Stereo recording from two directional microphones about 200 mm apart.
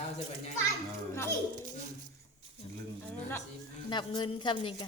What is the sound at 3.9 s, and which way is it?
Speech, 20° left (ahead or behind).